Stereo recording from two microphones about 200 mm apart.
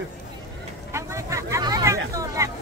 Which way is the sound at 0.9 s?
15° right (ahead or behind).